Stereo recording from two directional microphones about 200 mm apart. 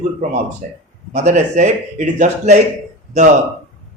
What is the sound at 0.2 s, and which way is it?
Speech, 40° right (ahead or behind).